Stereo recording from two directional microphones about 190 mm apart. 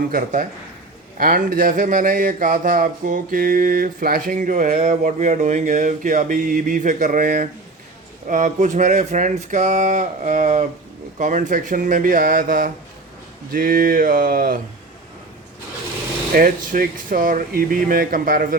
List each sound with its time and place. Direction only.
0.1 s speech: 45° right (ahead or behind)
16.3 s speech: 50° right (ahead or behind)